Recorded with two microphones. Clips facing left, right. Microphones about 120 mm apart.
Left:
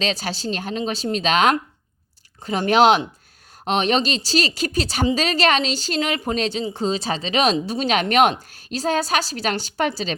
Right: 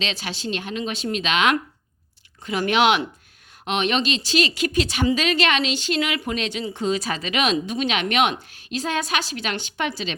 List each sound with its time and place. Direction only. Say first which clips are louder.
0.0 s speech: left 4 dB; 40° left (ahead or behind)